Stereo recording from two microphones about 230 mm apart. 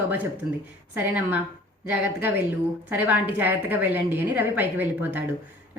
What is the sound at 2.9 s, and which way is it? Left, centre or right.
A woman's voice, centre.